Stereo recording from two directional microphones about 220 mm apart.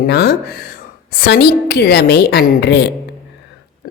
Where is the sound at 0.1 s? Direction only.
45° left (ahead or behind).